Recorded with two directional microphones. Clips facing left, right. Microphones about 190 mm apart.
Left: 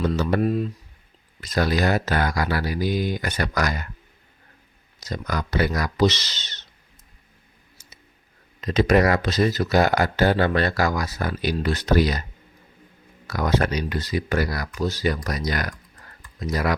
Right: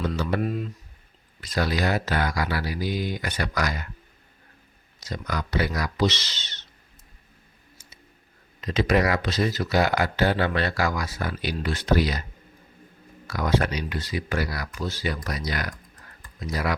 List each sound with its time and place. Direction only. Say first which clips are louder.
0.0 s speech: left 4 dB; 45° left (ahead or behind)
5.0 s speech: left 3 dB; 45° left (ahead or behind)
8.6 s speech: left 4 dB; 45° left (ahead or behind)
13.2 s speech: left 2 dB; 45° left (ahead or behind)